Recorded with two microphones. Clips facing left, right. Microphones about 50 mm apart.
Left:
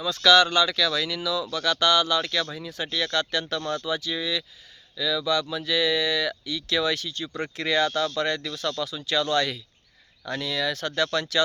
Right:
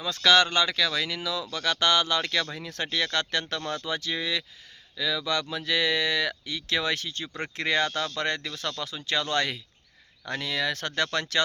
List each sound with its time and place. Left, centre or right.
0.0 s speech: right